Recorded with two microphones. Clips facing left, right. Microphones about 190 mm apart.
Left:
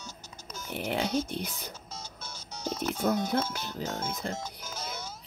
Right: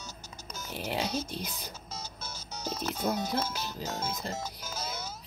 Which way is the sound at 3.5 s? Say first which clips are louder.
Left 1 dB; 55° left (ahead or behind).